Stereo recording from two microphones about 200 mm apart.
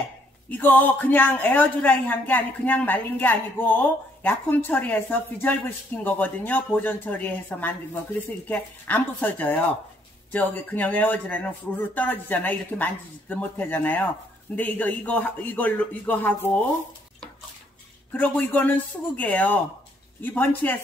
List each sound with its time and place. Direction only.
0.5 s a man's voice: 10° left (ahead or behind)
18.1 s a man's voice: 10° left (ahead or behind)